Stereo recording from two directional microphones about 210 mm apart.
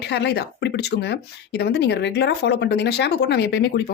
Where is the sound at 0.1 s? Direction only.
55° left (ahead or behind).